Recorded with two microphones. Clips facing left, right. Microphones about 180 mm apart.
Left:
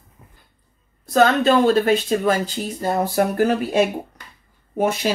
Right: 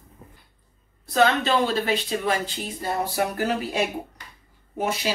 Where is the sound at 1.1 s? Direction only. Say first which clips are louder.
Left 5 dB; 45° left (ahead or behind).